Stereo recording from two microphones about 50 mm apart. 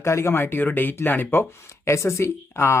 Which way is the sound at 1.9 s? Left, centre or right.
Left.